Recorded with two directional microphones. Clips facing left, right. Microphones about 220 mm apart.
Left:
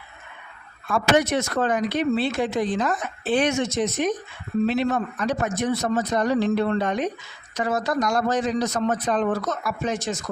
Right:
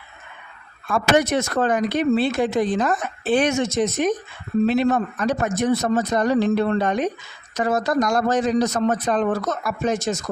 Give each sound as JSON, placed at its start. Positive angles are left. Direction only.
{"t": 0.9, "sound": "speech", "side_deg": -50}